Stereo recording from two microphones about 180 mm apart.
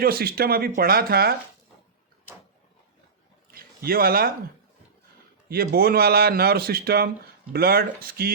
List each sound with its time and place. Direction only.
0.0 s a man's voice: 60° right (ahead or behind)
3.5 s a sound: 55° right (ahead or behind)
5.7 s a man's voice: 60° right (ahead or behind)